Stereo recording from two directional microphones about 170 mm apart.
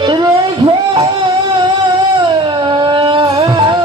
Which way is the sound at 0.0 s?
25° right (ahead or behind).